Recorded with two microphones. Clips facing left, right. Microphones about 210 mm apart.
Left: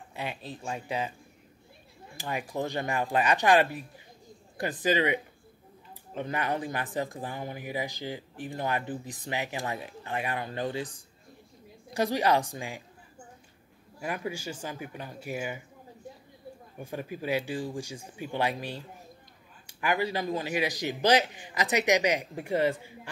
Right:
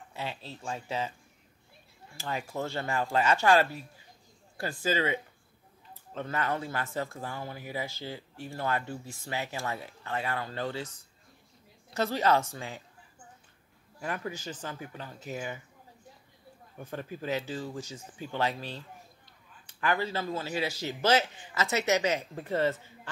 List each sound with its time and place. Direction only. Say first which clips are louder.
0.1 s speech: left 2 dB; 15° left (ahead or behind)
2.1 s speech: left 2 dB; 15° left (ahead or behind)
13.9 s speech: left 2 dB; 10° left (ahead or behind)
16.7 s speech: left 2 dB; 10° left (ahead or behind)